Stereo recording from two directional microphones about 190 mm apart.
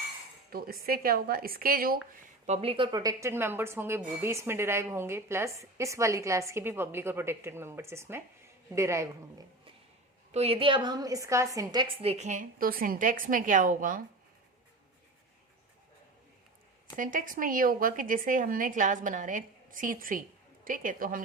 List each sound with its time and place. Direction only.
0.5 s speech: 50° right (ahead or behind)
2.5 s a woman's voice: 30° right (ahead or behind); by 9.0 s 15° right (ahead or behind)
10.3 s a woman's voice: 30° right (ahead or behind)
17.0 s speech: 45° right (ahead or behind)